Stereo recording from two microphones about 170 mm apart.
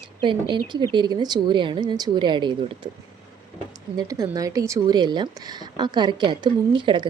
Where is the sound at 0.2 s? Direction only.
30° right (ahead or behind).